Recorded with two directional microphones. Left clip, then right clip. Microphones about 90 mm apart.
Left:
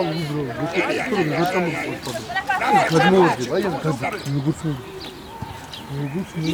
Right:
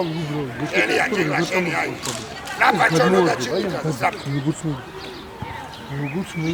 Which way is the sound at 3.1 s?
20° right (ahead or behind).